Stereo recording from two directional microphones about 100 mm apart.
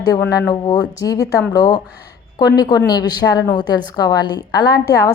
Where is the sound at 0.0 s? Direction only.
40° left (ahead or behind).